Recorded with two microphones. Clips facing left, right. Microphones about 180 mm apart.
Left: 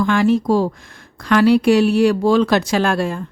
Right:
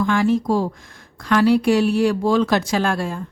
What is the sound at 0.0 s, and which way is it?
Speech, 80° left.